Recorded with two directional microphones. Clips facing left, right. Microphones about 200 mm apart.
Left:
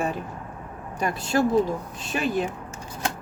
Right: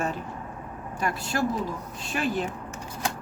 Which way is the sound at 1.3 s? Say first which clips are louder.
Left 9 dB; 25° left (ahead or behind).